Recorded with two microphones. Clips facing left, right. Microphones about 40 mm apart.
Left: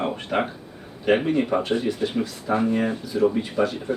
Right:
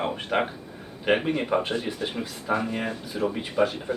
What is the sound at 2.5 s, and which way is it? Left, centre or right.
Speech, right.